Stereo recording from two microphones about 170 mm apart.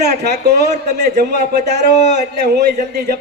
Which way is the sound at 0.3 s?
75° right (ahead or behind).